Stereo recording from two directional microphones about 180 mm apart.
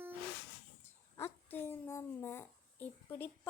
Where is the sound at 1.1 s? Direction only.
10° left (ahead or behind).